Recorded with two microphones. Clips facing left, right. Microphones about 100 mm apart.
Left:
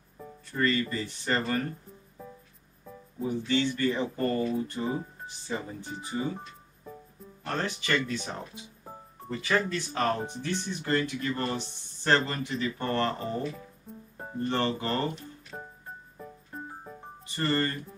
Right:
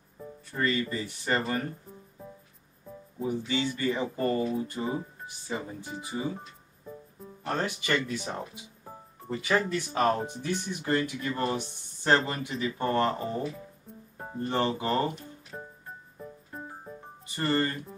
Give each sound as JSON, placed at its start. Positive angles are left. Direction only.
{"t": 0.5, "sound": "speech", "side_deg": -15}
{"t": 3.4, "sound": "speech", "side_deg": -10}
{"t": 7.4, "sound": "speech", "side_deg": -15}
{"t": 14.5, "sound": "speech", "side_deg": -15}
{"t": 17.4, "sound": "speech", "side_deg": -15}